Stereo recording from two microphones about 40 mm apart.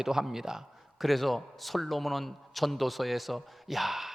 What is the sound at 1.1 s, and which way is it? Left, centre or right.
A man's voice, centre.